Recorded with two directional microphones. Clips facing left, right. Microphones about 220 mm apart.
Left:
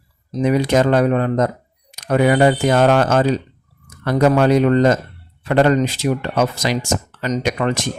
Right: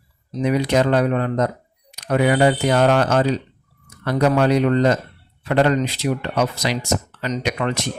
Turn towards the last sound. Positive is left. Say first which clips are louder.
# left 3 dB
turn(degrees=45)  # may be behind; listen again after turning